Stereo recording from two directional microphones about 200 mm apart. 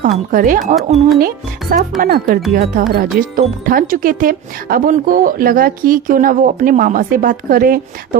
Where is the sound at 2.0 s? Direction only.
45° right (ahead or behind).